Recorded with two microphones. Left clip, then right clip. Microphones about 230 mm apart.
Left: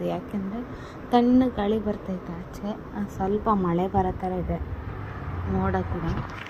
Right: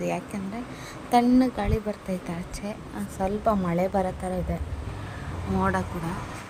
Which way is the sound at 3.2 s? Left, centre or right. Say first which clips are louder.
Left 1 dB; right.